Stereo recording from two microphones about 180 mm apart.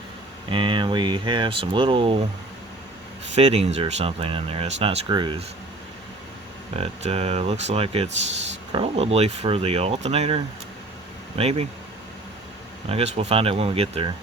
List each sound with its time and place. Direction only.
0.5 s speech: 25° right (ahead or behind)
3.3 s speech: 35° right (ahead or behind)
6.7 s speech: 35° right (ahead or behind)
12.9 s speech: 35° right (ahead or behind)